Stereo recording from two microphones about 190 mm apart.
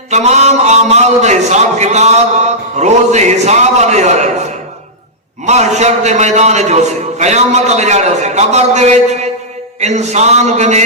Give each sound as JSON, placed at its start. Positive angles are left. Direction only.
{"t": 0.1, "sound": "a man's voice", "side_deg": -35}
{"t": 5.5, "sound": "a man's voice", "side_deg": -35}